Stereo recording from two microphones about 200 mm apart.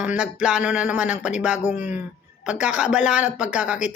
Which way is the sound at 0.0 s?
5° right (ahead or behind).